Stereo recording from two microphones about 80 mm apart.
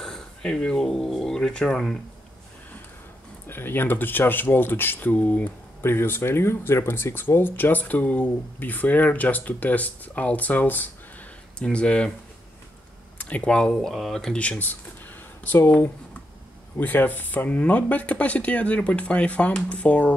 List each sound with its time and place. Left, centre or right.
0.0 s speech: centre
3.4 s speech: left
5.8 s speech: left; by 12.1 s centre
13.2 s speech: centre
13.7 s speech: centre